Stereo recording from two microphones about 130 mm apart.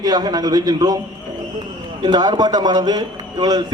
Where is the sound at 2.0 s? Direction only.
30° right (ahead or behind).